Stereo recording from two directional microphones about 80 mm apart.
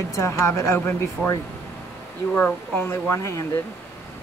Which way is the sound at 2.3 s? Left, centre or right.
Left.